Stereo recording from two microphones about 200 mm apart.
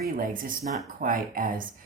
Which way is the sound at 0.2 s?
45° right (ahead or behind).